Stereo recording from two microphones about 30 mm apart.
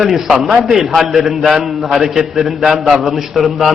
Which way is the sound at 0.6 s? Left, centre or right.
Centre.